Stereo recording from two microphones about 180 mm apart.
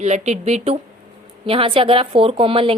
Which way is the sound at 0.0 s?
40° right (ahead or behind).